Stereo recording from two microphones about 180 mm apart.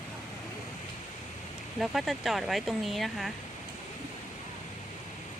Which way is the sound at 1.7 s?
Centre (ahead or behind).